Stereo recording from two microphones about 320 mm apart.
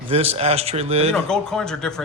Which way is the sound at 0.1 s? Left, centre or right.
Centre.